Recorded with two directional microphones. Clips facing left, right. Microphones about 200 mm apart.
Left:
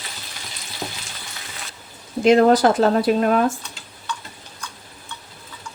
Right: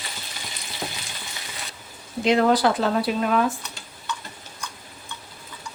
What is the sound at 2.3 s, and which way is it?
Speech, 45° left (ahead or behind).